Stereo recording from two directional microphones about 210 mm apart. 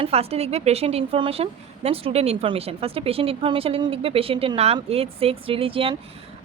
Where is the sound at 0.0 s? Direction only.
30° right (ahead or behind).